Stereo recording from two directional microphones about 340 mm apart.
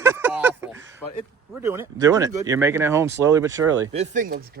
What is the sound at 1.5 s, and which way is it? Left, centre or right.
Speech, centre.